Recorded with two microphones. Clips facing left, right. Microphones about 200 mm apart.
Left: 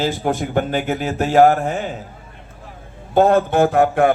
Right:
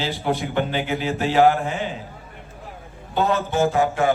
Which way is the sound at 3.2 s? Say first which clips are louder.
Left 7 dB; 50° left (ahead or behind).